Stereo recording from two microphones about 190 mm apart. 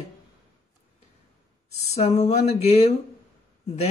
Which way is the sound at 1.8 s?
35° left (ahead or behind).